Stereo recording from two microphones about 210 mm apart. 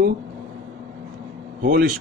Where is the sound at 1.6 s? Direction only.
40° right (ahead or behind).